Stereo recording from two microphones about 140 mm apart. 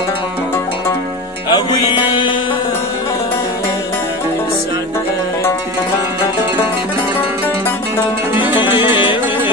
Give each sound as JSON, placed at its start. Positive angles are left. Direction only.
{"t": 1.5, "sound": "music", "side_deg": 35}
{"t": 8.5, "sound": "music", "side_deg": 35}